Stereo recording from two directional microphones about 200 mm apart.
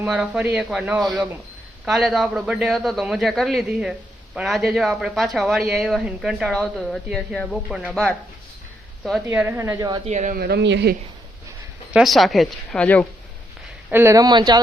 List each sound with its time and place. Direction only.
0.0 s a woman's voice: 5° right (ahead or behind)
10.1 s speech: 35° right (ahead or behind)
10.3 s speech: 55° right (ahead or behind)
11.9 s speech: centre (ahead or behind)
13.9 s speech: 15° right (ahead or behind)